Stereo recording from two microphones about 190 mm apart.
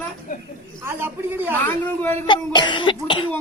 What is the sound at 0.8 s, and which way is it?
Speech, 10° right (ahead or behind).